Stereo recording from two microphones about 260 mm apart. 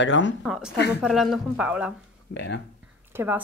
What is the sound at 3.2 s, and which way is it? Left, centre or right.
Speech, centre.